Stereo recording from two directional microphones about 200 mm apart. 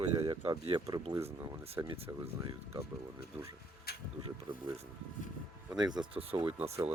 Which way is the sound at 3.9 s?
50° left (ahead or behind).